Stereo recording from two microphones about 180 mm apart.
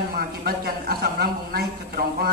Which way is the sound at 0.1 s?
55° right (ahead or behind).